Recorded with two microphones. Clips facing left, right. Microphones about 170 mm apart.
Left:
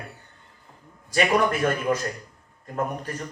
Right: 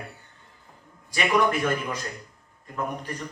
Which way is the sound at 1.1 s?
45° left (ahead or behind).